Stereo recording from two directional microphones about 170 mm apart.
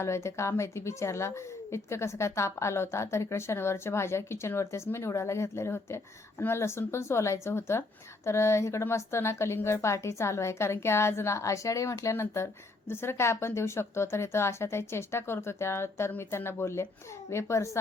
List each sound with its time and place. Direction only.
0.0 s speech: 15° left (ahead or behind)